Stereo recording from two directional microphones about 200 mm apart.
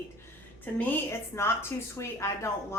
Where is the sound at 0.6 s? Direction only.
10° left (ahead or behind).